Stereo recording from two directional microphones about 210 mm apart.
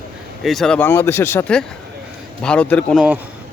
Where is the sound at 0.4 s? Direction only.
Centre (ahead or behind).